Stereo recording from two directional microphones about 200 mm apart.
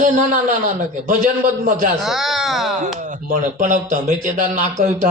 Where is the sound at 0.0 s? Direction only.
40° right (ahead or behind).